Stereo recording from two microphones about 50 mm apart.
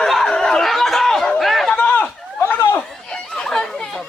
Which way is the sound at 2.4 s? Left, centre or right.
Left.